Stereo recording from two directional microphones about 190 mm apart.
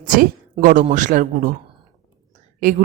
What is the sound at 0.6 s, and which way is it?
Speech, 40° right (ahead or behind).